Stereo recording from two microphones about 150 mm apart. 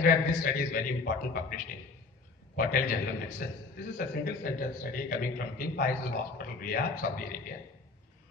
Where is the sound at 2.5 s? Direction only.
70° left (ahead or behind).